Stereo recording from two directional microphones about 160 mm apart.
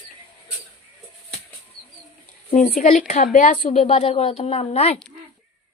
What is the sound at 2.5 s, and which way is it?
A woman's voice, 55° left (ahead or behind).